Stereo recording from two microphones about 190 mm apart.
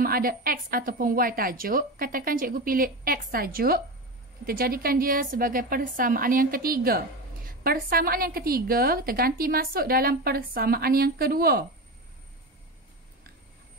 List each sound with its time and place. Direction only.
0.0 s a woman's voice: 50° right (ahead or behind)